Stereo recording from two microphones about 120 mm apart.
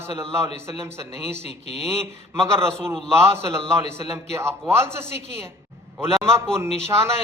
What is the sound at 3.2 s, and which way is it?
A man's voice, 20° right (ahead or behind).